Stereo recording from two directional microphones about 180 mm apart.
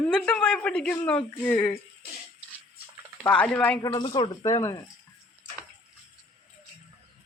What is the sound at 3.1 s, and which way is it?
Speech, 5° left (ahead or behind).